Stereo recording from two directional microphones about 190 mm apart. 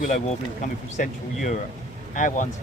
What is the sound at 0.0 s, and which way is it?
Speech, 45° left (ahead or behind).